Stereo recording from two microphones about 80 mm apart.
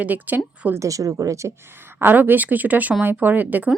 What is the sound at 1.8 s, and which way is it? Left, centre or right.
Speech, right.